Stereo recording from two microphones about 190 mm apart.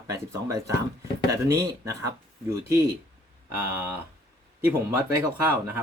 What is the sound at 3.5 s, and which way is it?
Speech, 10° right (ahead or behind).